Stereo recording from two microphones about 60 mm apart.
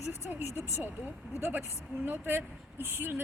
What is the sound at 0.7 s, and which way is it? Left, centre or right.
Speech, left.